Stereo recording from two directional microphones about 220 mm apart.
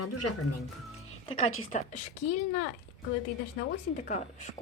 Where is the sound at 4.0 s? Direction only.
35° left (ahead or behind).